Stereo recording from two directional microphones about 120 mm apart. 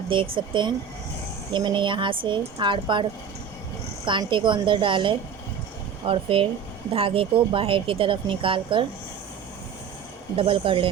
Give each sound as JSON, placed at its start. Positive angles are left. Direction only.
{"t": 0.1, "sound": "a woman's voice", "side_deg": -45}
{"t": 10.3, "sound": "speech", "side_deg": -50}